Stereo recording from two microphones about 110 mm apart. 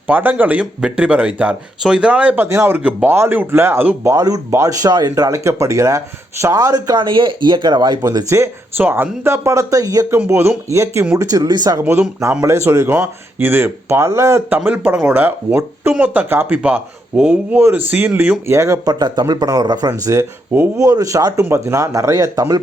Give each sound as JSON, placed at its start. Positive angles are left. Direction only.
{"t": 0.1, "sound": "speech", "side_deg": -15}
{"t": 4.2, "sound": "speech", "side_deg": -35}
{"t": 8.8, "sound": "speech", "side_deg": -20}
{"t": 11.8, "sound": "speech", "side_deg": -20}